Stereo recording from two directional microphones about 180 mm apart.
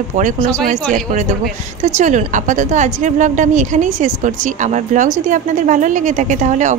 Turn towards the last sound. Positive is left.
turn(degrees=-45)  # may be behind; listen again after turning